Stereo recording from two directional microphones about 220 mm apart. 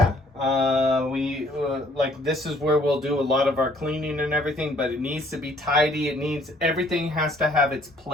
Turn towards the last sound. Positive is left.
turn(degrees=0)  # may be behind; listen again after turning